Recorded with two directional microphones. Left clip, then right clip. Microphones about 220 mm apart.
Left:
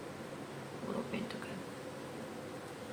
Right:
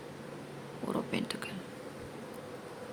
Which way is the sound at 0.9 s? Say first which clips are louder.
Right 5 dB; 55° right (ahead or behind).